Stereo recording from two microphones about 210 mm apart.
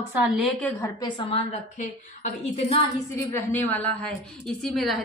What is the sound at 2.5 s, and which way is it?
Speech, 30° left (ahead or behind).